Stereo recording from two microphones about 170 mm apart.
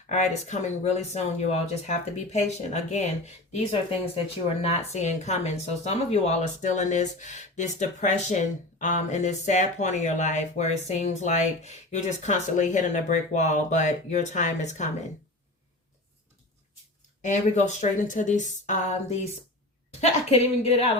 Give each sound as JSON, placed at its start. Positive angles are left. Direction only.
{"t": 0.1, "sound": "a woman's voice", "side_deg": 45}
{"t": 17.2, "sound": "a woman's voice", "side_deg": 45}